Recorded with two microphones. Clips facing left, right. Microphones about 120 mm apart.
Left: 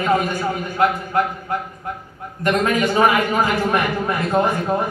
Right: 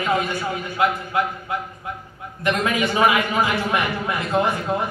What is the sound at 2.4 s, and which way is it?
A man's voice, 45° left (ahead or behind).